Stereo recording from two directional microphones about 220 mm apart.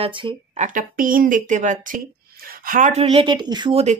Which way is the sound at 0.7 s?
40° right (ahead or behind).